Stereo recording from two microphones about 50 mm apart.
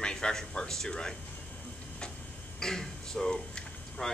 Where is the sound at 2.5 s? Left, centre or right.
Centre.